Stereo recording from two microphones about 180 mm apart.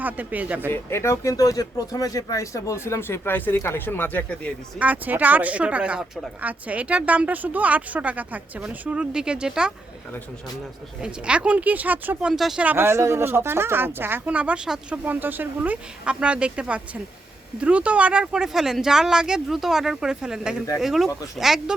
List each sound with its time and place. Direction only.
0.0 s speech: 10° right (ahead or behind)
0.7 s speech: 15° left (ahead or behind)
4.8 s speech: 10° right (ahead or behind)
11.0 s speech: 5° right (ahead or behind)